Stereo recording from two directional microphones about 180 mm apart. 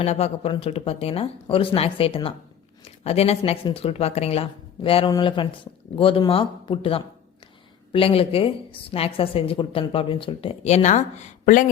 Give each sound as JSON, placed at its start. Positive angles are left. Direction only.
{"t": 0.0, "sound": "a woman's voice", "side_deg": 35}